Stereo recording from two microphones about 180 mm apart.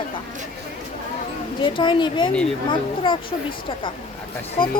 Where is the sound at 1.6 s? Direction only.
25° left (ahead or behind).